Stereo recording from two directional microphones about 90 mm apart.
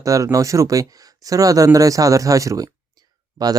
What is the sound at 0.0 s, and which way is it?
Speech, 40° right (ahead or behind).